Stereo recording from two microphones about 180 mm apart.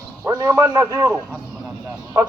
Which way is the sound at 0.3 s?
20° right (ahead or behind).